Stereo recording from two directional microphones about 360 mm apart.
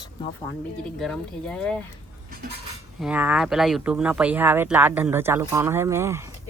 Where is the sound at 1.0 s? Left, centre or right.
Centre.